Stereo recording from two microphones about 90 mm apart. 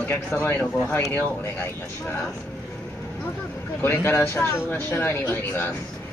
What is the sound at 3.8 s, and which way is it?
Speech, 25° left (ahead or behind).